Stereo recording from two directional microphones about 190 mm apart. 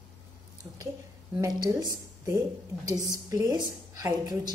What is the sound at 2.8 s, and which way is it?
A woman's voice, 20° right (ahead or behind).